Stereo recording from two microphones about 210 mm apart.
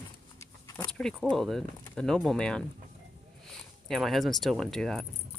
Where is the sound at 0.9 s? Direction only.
5° left (ahead or behind).